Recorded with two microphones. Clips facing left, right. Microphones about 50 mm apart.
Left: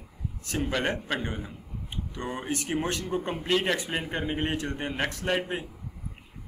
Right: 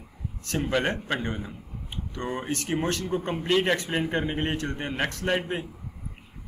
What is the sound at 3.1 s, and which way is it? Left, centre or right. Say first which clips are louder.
Speech: right 1 dB; centre.